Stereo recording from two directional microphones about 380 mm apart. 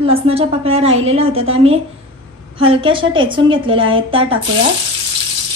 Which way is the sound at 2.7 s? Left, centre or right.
Centre.